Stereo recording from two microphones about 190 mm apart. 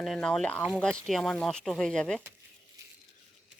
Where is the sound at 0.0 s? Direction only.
5° left (ahead or behind).